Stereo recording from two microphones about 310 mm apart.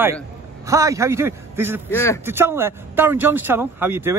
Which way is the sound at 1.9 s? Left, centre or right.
Centre.